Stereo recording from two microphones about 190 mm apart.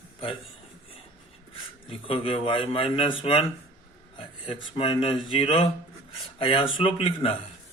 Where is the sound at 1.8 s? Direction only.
30° left (ahead or behind).